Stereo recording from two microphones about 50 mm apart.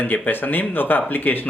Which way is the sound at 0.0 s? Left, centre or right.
Left.